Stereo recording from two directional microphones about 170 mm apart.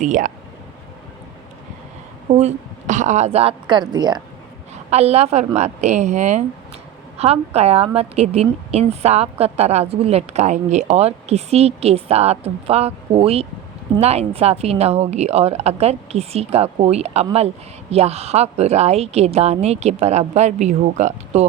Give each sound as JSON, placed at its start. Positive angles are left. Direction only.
{"t": 0.0, "sound": "speech", "side_deg": -50}
{"t": 2.3, "sound": "a woman's voice", "side_deg": -45}
{"t": 4.7, "sound": "a woman's voice", "side_deg": -40}